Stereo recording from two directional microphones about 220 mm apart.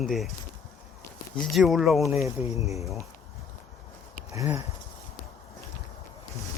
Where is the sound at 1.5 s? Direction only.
Centre (ahead or behind).